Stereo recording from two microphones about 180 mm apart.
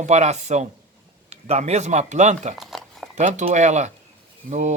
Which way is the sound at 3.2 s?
40° right (ahead or behind).